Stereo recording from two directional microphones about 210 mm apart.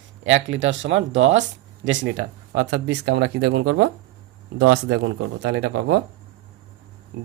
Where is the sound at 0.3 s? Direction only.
60° right (ahead or behind).